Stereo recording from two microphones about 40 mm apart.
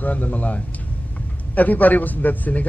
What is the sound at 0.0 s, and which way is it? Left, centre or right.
A man's voice, left.